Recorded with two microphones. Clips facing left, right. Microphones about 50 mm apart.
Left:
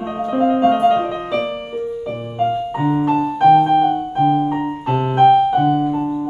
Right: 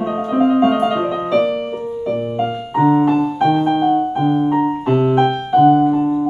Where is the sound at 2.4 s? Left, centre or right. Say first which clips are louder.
Right 3 dB; right.